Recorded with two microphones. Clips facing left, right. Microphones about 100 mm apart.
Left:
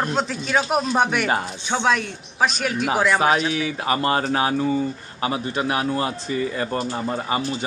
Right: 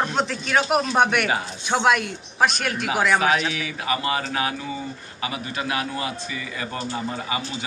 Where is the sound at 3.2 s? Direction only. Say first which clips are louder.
Left 3 dB; 30° left (ahead or behind).